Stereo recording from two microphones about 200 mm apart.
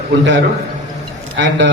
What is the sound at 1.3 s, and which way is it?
Speech, 65° right (ahead or behind).